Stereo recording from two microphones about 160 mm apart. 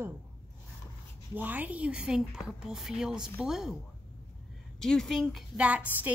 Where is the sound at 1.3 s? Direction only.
10° right (ahead or behind).